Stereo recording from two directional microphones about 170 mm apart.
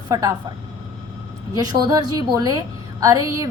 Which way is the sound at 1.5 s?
20° right (ahead or behind).